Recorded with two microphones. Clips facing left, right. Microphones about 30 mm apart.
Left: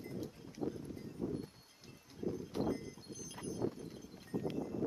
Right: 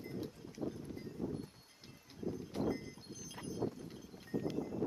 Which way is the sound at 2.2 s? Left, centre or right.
Centre.